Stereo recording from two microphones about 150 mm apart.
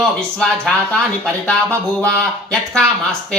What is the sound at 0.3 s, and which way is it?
Speech, 5° left (ahead or behind).